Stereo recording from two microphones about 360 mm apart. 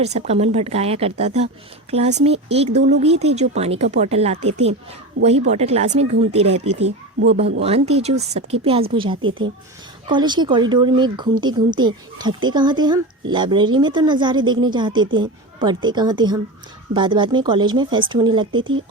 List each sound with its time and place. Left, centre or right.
0.0 s a woman's voice: centre
5.2 s speech: right
5.5 s a woman's voice: centre